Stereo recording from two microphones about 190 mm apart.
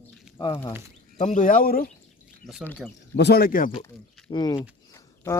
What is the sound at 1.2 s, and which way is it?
Speech, 40° left (ahead or behind).